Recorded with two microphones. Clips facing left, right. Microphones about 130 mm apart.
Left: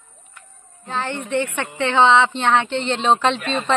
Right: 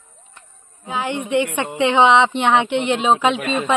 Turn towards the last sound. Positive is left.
turn(degrees=-5)  # may be behind; listen again after turning